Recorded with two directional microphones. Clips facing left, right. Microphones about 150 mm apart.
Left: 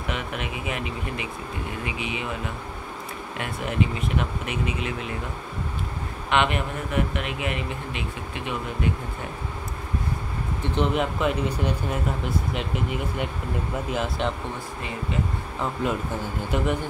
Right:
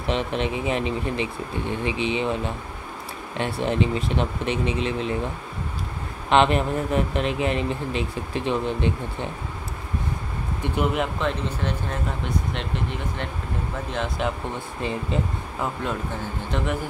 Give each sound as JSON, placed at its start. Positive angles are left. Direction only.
{"t": 0.0, "sound": "speech", "side_deg": -30}
{"t": 6.3, "sound": "speech", "side_deg": -35}
{"t": 10.6, "sound": "speech", "side_deg": -10}
{"t": 15.8, "sound": "speech", "side_deg": 5}